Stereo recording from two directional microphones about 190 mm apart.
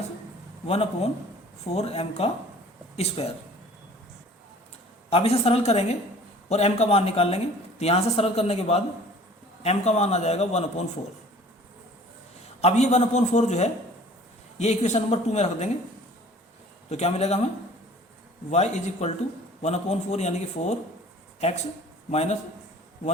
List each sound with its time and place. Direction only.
0.7 s speech: 30° left (ahead or behind)
5.0 s speech: 30° left (ahead or behind)
12.6 s speech: 35° left (ahead or behind)
16.9 s speech: 35° left (ahead or behind)
18.5 s speech: 35° left (ahead or behind)
22.1 s speech: 35° left (ahead or behind)